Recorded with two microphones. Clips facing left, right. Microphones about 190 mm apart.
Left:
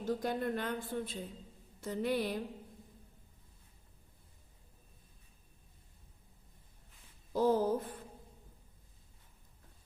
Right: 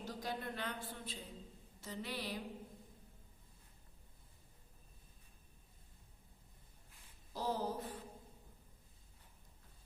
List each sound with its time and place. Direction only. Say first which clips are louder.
0.0 s speech: left 9 dB; 50° left (ahead or behind)
7.3 s speech: left 10 dB; 50° left (ahead or behind)